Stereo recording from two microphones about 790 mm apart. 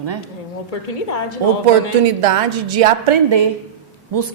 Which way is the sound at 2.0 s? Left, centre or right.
Right.